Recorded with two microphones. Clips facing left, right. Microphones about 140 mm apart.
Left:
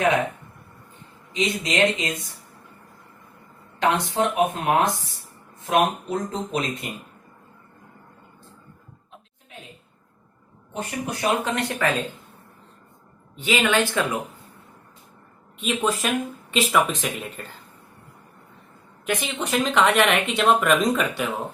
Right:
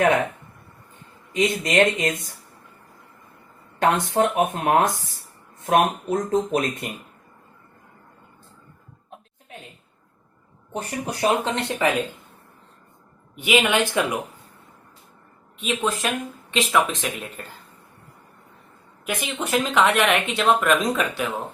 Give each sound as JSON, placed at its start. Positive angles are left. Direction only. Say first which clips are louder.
{"t": 1.3, "sound": "speech", "louder": "right 3 dB", "side_deg": -50}
{"t": 3.8, "sound": "speech", "louder": "right 2 dB", "side_deg": -50}
{"t": 10.7, "sound": "speech", "louder": "right 1 dB", "side_deg": -35}
{"t": 13.3, "sound": "speech", "louder": "right 1 dB", "side_deg": -15}
{"t": 15.6, "sound": "speech", "louder": "left 1 dB", "side_deg": 0}
{"t": 19.0, "sound": "speech", "louder": "left 1 dB", "side_deg": 0}